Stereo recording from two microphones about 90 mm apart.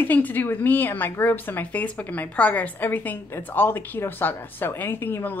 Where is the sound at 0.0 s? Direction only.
20° left (ahead or behind).